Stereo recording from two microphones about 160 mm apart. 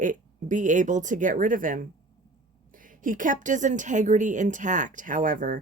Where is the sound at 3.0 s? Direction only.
55° right (ahead or behind).